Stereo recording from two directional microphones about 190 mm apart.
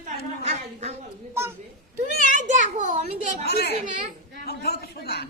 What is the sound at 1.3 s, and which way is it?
Speech, 15° right (ahead or behind).